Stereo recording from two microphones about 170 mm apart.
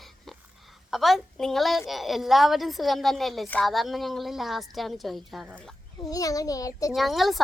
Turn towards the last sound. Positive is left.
turn(degrees=0)  # may be behind; listen again after turning